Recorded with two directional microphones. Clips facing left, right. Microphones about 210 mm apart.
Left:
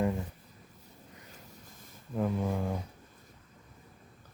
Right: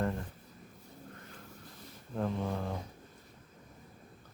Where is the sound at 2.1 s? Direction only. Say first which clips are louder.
Left 3 dB; 5° left (ahead or behind).